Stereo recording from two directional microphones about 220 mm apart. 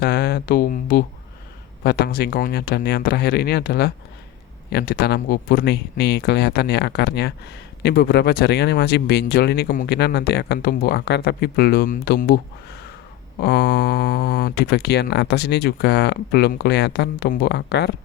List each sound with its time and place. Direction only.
0.0 s speech: 45° left (ahead or behind)
13.4 s speech: 45° left (ahead or behind)